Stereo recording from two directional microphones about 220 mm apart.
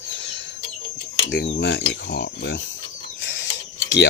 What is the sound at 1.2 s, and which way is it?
Speech, 50° left (ahead or behind).